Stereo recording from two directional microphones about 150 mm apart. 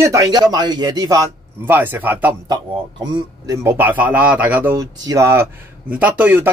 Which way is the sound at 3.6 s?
10° right (ahead or behind).